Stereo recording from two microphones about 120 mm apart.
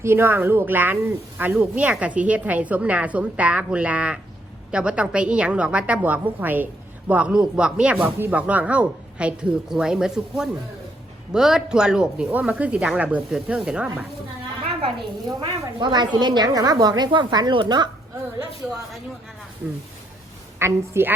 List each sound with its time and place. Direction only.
0.0 s speech: 20° right (ahead or behind)
14.6 s a sound: 50° right (ahead or behind)
15.4 s a woman's voice: 40° right (ahead or behind)
20.6 s a woman's voice: 20° right (ahead or behind)